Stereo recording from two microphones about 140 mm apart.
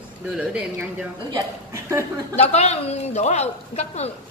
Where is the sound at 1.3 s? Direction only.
25° right (ahead or behind).